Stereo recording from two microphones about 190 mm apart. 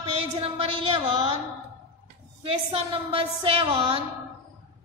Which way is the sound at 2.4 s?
30° right (ahead or behind).